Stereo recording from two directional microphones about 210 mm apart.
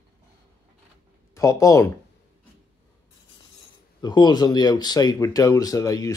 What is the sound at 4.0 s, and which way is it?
Speech, 20° left (ahead or behind).